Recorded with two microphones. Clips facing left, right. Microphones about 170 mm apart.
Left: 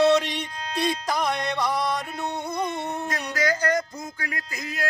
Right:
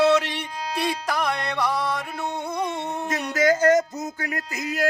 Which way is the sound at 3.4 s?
45° right (ahead or behind).